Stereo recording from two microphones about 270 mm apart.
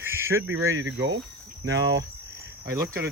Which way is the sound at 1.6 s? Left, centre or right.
Centre.